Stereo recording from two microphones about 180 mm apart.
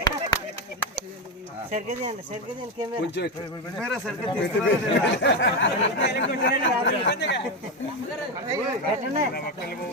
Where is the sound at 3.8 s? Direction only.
Centre (ahead or behind).